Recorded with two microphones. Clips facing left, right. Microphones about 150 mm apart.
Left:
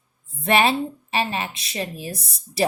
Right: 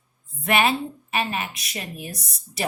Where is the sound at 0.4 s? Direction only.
30° left (ahead or behind).